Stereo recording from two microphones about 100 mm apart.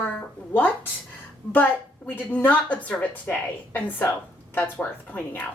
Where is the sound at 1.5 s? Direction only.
20° left (ahead or behind).